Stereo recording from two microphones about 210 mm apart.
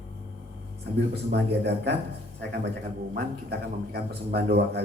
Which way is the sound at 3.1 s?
50° right (ahead or behind).